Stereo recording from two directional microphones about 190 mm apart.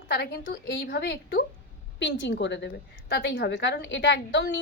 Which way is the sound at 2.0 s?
70° left (ahead or behind).